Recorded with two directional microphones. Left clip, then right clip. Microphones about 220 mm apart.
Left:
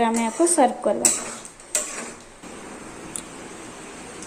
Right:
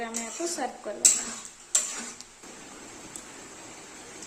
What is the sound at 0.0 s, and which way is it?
Speech, 20° left (ahead or behind).